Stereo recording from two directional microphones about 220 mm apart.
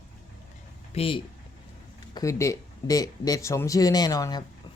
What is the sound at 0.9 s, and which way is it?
Speech, 25° left (ahead or behind).